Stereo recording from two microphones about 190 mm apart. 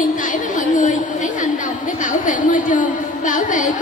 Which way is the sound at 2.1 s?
45° left (ahead or behind).